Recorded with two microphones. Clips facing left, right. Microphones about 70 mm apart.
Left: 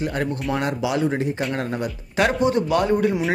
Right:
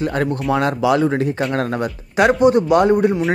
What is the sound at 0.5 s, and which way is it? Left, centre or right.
Speech, right.